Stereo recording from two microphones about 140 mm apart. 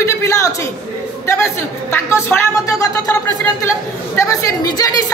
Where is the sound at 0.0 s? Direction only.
20° left (ahead or behind).